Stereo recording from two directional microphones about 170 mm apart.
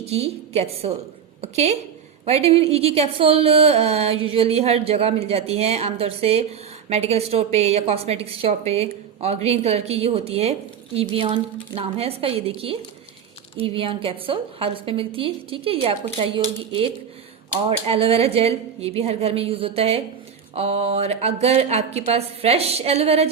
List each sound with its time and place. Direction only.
0.0 s a woman's voice: 35° right (ahead or behind)